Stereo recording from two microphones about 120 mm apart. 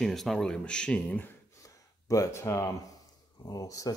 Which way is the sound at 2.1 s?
25° left (ahead or behind).